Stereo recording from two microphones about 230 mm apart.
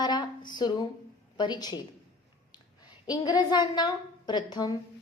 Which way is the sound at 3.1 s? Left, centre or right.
Centre.